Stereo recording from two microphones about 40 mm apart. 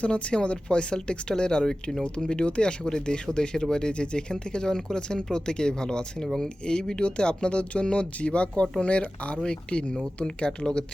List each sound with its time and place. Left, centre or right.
0.0 s speech: left; by 2.0 s centre
2.0 s speech: left